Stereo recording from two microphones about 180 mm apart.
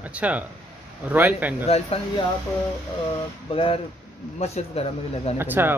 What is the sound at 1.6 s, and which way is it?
Speech, 35° left (ahead or behind).